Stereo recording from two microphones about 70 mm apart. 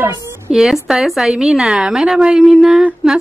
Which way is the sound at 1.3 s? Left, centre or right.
Centre.